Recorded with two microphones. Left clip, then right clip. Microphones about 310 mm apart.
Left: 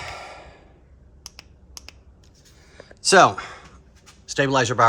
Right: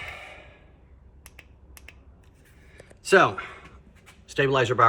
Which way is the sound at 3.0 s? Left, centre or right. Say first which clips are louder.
Left 5 dB; centre.